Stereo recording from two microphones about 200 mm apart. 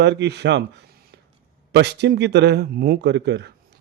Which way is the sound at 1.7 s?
55° right (ahead or behind).